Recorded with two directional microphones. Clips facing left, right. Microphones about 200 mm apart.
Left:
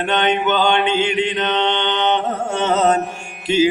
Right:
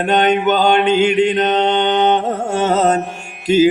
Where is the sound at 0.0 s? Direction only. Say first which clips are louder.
Right 4 dB; 45° right (ahead or behind).